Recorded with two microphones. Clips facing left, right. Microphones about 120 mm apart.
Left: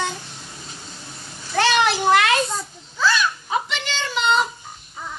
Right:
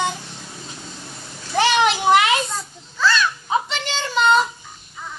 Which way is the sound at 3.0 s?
15° left (ahead or behind).